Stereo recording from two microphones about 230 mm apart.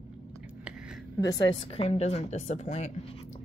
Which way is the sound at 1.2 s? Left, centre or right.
Centre.